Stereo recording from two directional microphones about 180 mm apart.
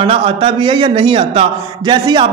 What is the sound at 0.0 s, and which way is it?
A man's voice, 30° right (ahead or behind).